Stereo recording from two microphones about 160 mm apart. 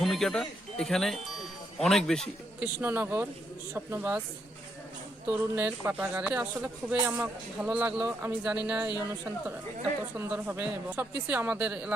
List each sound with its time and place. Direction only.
0.0 s speech: centre (ahead or behind)
2.8 s speech: 10° right (ahead or behind)
5.3 s speech: 10° right (ahead or behind)